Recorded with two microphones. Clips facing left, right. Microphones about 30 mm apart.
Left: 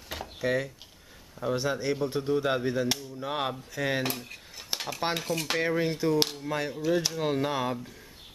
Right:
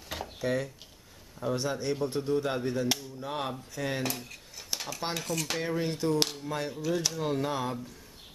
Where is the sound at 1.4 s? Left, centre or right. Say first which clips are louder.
Left 2 dB; centre.